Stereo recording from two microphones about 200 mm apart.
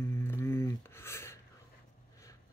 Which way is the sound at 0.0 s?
10° left (ahead or behind).